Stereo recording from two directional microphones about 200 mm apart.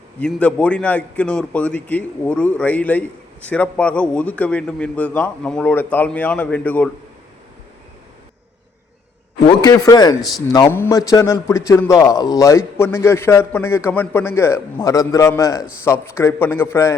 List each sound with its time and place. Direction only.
0.2 s a man's voice: 5° left (ahead or behind)
9.5 s a man's voice: 20° left (ahead or behind)